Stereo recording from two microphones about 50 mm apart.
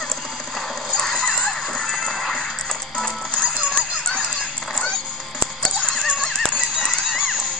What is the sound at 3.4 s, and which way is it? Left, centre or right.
Music, centre.